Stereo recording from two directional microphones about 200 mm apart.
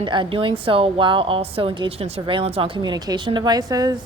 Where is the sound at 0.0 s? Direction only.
25° right (ahead or behind).